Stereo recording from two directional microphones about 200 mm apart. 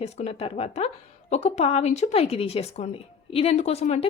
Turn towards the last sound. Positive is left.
turn(degrees=30)  # may be behind; listen again after turning